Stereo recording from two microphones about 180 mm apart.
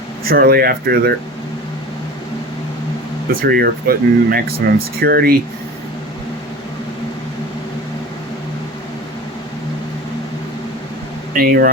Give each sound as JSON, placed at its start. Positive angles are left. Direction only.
{"t": 0.3, "sound": "speech", "side_deg": -55}
{"t": 3.4, "sound": "speech", "side_deg": -60}
{"t": 11.3, "sound": "speech", "side_deg": -55}